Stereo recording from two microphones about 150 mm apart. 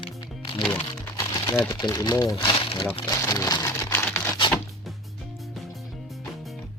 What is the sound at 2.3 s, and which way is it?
Speech, 35° left (ahead or behind).